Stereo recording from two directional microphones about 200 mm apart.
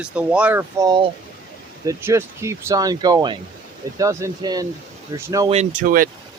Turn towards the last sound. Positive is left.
turn(degrees=-45)  # may be behind; listen again after turning